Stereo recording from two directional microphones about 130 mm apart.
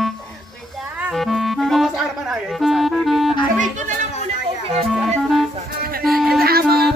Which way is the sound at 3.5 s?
70° right (ahead or behind).